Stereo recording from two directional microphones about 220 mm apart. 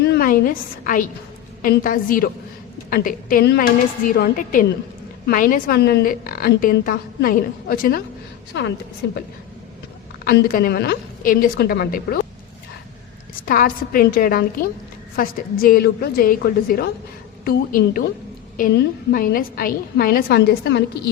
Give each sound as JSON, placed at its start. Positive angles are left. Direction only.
{"t": 0.0, "sound": "a woman's voice", "side_deg": 45}
{"t": 9.0, "sound": "a woman's voice", "side_deg": 50}
{"t": 10.2, "sound": "a woman's voice", "side_deg": 40}
{"t": 13.4, "sound": "a woman's voice", "side_deg": 40}